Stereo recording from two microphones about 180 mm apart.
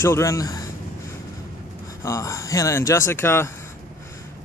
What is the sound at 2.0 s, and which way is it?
Speech, 15° left (ahead or behind).